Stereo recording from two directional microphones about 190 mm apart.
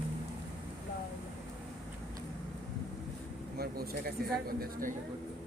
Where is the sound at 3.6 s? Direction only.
55° right (ahead or behind).